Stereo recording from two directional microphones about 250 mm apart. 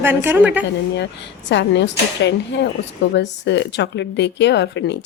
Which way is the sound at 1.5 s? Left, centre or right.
Left.